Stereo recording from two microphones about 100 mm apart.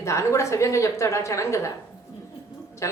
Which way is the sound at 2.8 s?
30° left (ahead or behind).